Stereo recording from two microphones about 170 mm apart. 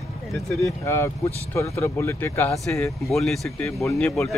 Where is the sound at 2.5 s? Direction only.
Centre (ahead or behind).